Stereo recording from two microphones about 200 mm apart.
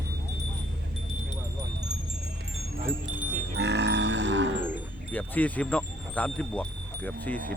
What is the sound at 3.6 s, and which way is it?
Livestock, 60° right (ahead or behind).